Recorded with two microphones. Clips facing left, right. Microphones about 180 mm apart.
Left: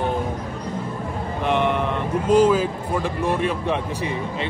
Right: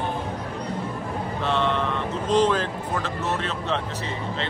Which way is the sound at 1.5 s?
15° left (ahead or behind).